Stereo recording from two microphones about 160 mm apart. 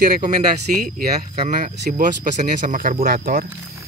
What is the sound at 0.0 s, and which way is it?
Speech, 65° right (ahead or behind).